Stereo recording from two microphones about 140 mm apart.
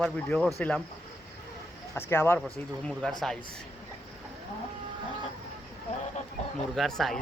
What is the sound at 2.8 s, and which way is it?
Speech, 5° left (ahead or behind).